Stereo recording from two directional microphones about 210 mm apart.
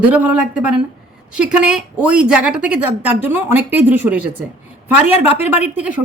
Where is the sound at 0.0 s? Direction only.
5° right (ahead or behind).